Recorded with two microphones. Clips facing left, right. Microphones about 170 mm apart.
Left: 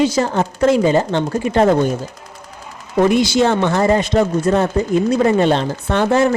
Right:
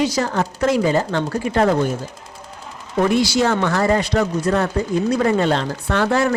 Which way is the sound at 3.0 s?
20° left (ahead or behind).